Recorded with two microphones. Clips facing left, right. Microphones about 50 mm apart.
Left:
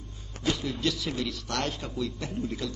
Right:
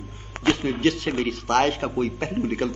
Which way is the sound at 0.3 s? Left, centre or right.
Right.